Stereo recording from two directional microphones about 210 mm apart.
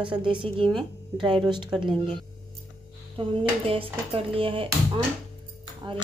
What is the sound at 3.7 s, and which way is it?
Speech, 25° right (ahead or behind).